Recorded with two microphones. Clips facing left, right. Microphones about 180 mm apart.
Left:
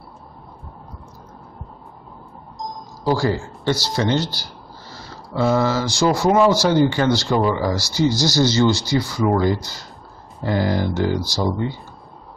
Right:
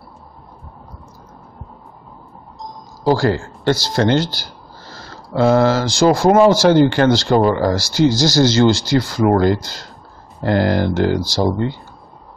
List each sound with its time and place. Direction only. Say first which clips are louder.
3.2 s speech: right 3 dB; 80° right
4.1 s speech: right 4 dB; 90° right
4.8 s speech: right 2 dB; 55° right (ahead or behind); by 7.3 s 70° right (ahead or behind)
7.3 s speech: right 5 dB; 55° right (ahead or behind); by 9.3 s 85° right
9.3 s speech: right 4 dB; 70° right (ahead or behind)